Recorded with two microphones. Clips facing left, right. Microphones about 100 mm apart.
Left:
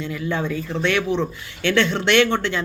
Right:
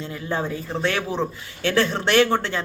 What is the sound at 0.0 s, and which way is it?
Speech, 35° right (ahead or behind).